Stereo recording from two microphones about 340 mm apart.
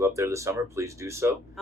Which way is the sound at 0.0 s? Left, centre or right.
Centre.